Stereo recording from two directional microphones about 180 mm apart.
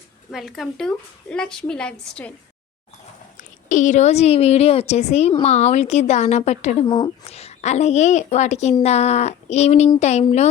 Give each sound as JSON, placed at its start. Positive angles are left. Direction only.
{"t": 0.3, "sound": "a woman's voice", "side_deg": 0}
{"t": 3.7, "sound": "a woman's voice", "side_deg": 45}